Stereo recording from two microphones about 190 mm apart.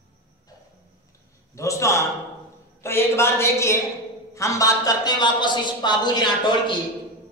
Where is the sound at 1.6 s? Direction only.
15° left (ahead or behind).